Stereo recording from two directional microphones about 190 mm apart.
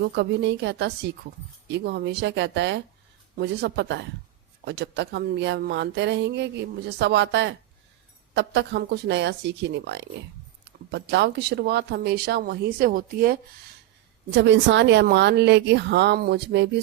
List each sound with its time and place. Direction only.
0.0 s speech: 60° right (ahead or behind)
14.3 s a woman's voice: 65° right (ahead or behind)